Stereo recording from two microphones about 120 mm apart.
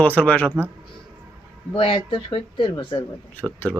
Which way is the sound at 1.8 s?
50° left (ahead or behind).